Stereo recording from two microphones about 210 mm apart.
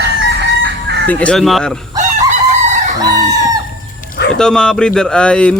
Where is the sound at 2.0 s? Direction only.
35° right (ahead or behind).